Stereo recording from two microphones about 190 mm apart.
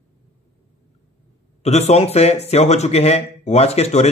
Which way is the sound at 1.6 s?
35° left (ahead or behind).